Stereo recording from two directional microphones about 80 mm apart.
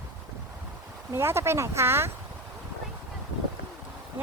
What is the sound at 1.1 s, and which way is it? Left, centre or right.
Speech, right.